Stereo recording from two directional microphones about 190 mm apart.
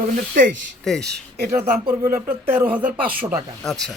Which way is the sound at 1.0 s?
60° right (ahead or behind).